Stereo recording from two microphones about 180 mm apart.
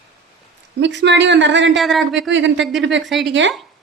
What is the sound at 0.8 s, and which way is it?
Speech, 80° right.